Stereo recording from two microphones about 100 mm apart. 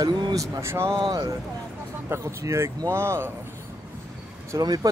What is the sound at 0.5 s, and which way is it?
Speech, 25° right (ahead or behind).